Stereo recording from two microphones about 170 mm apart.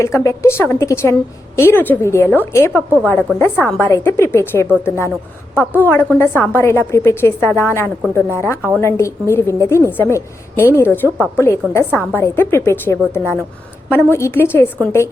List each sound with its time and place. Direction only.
0.0 s a woman's voice: 15° left (ahead or behind)